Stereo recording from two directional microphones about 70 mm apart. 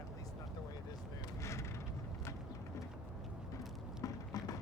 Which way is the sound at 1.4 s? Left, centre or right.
Left.